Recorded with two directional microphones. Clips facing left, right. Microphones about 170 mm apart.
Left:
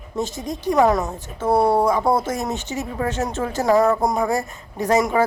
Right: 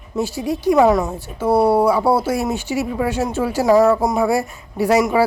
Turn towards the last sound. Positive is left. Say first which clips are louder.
# right 3 dB
turn(degrees=-10)  # may be behind; listen again after turning